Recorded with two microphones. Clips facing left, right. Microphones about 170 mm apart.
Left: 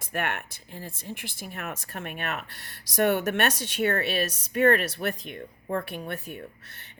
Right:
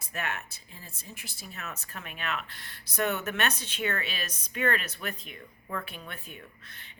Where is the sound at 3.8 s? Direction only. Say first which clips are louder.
Left 10 dB; 45° left (ahead or behind).